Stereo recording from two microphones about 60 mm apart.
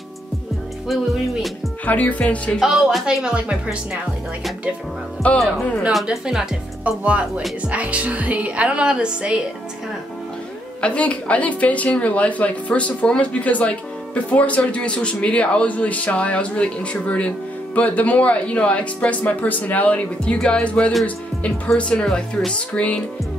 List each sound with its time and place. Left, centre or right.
1.9 s a woman's voice: left
2.6 s speech: centre
3.3 s speech: centre
5.2 s a woman's voice: left
6.0 s speech: centre
7.0 s speech: right
10.8 s a woman's voice: left
20.4 s music: centre
21.7 s a woman's voice: centre
22.0 s music: centre
22.5 s a woman's voice: centre